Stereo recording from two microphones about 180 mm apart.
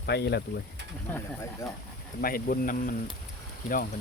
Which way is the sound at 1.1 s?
15° left (ahead or behind).